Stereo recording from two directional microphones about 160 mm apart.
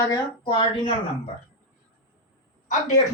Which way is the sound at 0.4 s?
30° left (ahead or behind).